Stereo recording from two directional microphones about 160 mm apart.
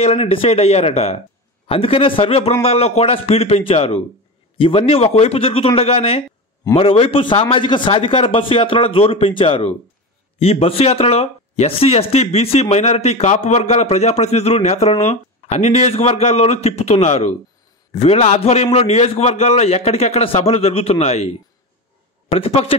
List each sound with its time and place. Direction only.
0.0 s a man's voice: 40° left (ahead or behind)